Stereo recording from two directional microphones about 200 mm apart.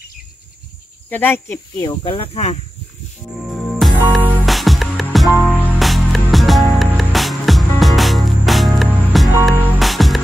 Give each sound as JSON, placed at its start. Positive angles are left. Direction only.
{"t": 1.1, "sound": "speech", "side_deg": 10}
{"t": 3.4, "sound": "music", "side_deg": 0}